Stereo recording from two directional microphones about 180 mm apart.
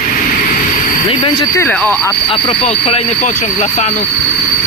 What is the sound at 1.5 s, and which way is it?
Speech, 10° left (ahead or behind).